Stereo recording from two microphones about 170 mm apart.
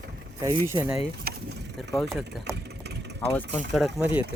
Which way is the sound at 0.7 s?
15° right (ahead or behind).